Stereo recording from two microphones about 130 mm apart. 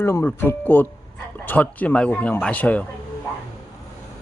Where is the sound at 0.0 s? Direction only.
20° left (ahead or behind).